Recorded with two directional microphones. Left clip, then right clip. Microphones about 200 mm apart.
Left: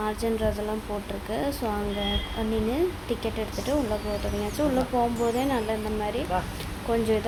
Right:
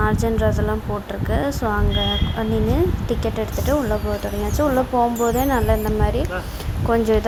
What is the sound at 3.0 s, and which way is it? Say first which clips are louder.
Speech: right 6 dB; 20° right (ahead or behind).